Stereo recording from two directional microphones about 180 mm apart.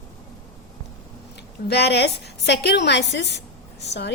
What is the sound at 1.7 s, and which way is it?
A woman's voice, 65° left (ahead or behind).